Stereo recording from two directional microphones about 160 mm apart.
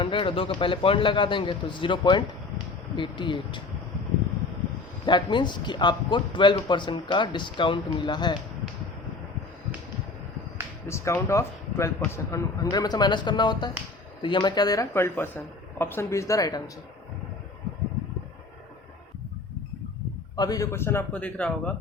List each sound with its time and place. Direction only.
0.0 s a man's voice: 30° left (ahead or behind)
5.0 s speech: 30° left (ahead or behind)
10.8 s speech: 20° left (ahead or behind)
20.3 s a man's voice: 25° left (ahead or behind); by 21.7 s 10° left (ahead or behind)